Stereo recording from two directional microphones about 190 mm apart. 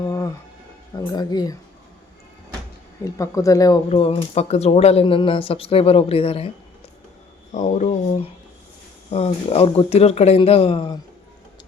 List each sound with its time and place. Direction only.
0.0 s a sound: 20° left (ahead or behind)
0.9 s speech: 20° left (ahead or behind)
3.0 s speech: 15° left (ahead or behind)
3.8 s speech: 30° left (ahead or behind)
7.5 s speech: 40° left (ahead or behind)